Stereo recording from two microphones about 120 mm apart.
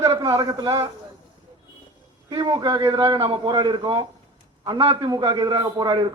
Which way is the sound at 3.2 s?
40° right (ahead or behind).